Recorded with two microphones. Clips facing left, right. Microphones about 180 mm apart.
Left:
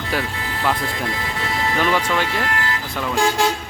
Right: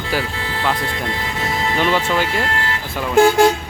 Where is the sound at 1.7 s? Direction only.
25° right (ahead or behind).